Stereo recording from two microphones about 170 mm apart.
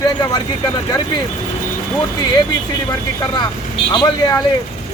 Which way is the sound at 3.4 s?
25° left (ahead or behind).